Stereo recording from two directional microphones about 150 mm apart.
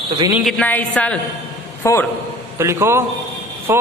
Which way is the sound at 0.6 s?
10° left (ahead or behind).